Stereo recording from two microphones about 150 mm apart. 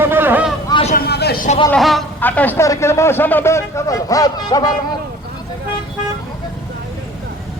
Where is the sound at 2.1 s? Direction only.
10° left (ahead or behind); by 4.7 s 25° left (ahead or behind).